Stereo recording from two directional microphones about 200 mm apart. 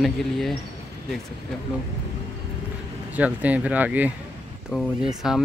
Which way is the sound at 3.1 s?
5° right (ahead or behind).